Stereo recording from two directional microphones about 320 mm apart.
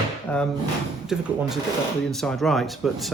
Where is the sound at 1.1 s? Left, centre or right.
Centre.